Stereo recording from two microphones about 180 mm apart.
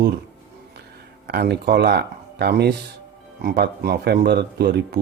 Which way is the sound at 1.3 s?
65° right (ahead or behind).